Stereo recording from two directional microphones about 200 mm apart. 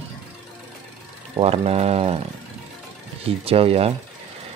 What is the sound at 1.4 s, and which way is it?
Speech, 30° right (ahead or behind).